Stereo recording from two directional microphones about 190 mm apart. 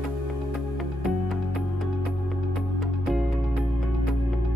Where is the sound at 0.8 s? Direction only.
Centre (ahead or behind).